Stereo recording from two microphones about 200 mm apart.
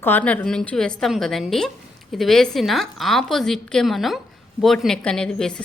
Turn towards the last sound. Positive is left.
turn(degrees=5)  # may be behind; listen again after turning